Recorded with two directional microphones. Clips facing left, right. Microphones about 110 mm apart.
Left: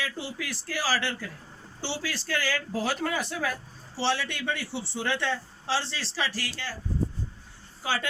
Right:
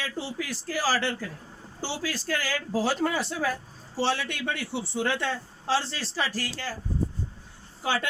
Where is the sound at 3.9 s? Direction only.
45° right (ahead or behind).